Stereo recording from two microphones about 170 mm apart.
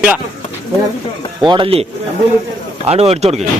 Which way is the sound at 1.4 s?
30° right (ahead or behind).